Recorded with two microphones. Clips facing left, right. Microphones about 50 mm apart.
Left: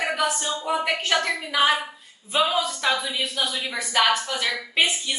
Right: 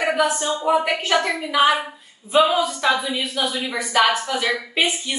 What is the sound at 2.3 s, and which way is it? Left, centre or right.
Speech, right.